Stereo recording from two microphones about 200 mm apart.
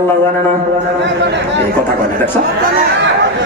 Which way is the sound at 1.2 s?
60° right (ahead or behind).